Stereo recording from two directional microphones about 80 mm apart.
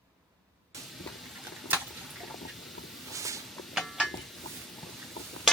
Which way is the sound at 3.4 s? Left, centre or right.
Centre.